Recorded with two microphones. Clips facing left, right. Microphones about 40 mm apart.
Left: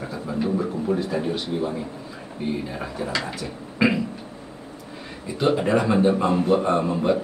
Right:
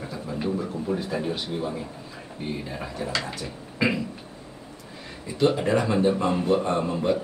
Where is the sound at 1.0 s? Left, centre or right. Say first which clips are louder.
Left 3 dB; centre.